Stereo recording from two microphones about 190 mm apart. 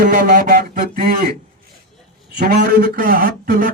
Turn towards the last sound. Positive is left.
turn(degrees=-50)  # may be behind; listen again after turning